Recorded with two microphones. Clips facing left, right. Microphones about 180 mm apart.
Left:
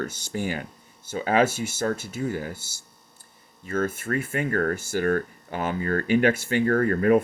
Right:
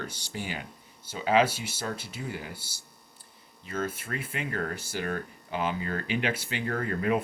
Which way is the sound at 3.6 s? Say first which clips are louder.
Left 6 dB; 50° left (ahead or behind).